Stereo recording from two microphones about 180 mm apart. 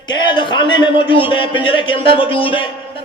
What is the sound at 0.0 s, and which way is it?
A man's voice, 25° left (ahead or behind).